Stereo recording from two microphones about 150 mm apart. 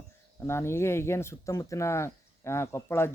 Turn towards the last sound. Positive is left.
turn(degrees=15)  # may be behind; listen again after turning